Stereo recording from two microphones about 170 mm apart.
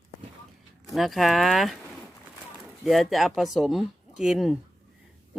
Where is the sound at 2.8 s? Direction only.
Centre (ahead or behind).